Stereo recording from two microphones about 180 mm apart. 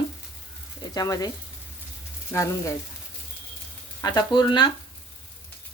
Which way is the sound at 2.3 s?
15° left (ahead or behind).